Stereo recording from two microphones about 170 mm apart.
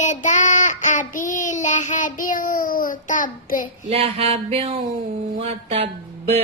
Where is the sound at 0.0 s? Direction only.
45° left (ahead or behind).